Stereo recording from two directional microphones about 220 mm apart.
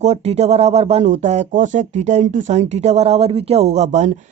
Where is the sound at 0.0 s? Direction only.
30° right (ahead or behind).